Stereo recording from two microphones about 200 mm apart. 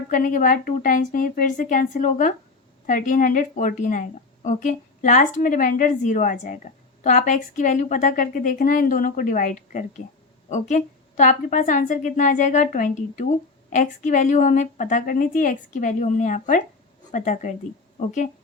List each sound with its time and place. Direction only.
0.1 s a woman's voice: 40° left (ahead or behind)